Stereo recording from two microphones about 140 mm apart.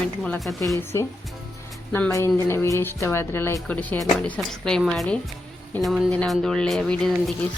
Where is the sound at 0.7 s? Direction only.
20° left (ahead or behind).